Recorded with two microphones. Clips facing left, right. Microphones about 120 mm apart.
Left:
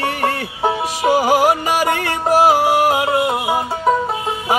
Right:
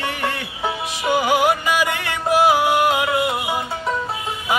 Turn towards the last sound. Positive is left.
turn(degrees=40)  # may be behind; listen again after turning